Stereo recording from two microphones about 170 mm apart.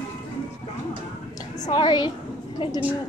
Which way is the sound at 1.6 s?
25° left (ahead or behind).